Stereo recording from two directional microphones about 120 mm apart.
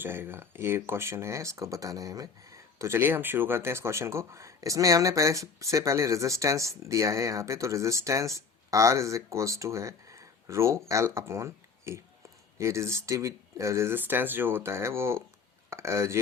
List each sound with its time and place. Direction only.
0.0 s speech: 20° right (ahead or behind)